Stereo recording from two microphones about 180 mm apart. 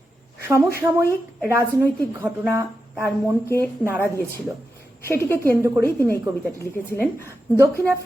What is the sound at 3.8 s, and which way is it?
Speech, 15° right (ahead or behind).